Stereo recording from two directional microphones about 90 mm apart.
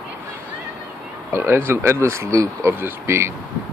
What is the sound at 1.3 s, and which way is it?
Speech, 25° right (ahead or behind).